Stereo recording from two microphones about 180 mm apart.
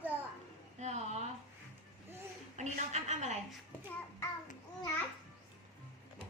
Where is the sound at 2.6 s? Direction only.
40° right (ahead or behind).